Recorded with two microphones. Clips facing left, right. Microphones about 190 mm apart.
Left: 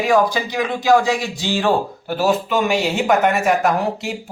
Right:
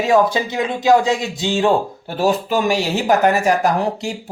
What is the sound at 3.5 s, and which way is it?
Speech, centre (ahead or behind).